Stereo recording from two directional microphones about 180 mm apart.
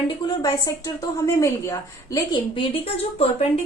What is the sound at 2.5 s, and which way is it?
Speech, 30° left (ahead or behind).